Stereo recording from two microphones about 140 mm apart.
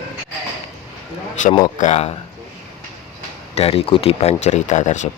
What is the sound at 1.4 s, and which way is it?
Speech, 60° left (ahead or behind).